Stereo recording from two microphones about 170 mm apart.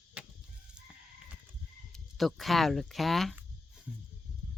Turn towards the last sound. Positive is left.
turn(degrees=0)  # may be behind; listen again after turning